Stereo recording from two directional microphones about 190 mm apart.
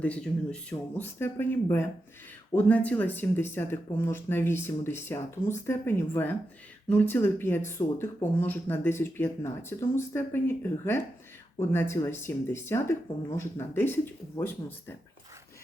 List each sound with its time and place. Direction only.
0.0 s speech: 5° left (ahead or behind)